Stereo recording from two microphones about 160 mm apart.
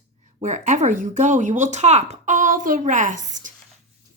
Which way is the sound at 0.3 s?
50° right (ahead or behind).